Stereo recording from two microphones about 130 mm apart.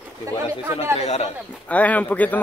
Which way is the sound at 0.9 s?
55° left (ahead or behind).